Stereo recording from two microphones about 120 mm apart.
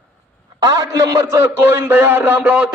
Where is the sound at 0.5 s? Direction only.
30° right (ahead or behind).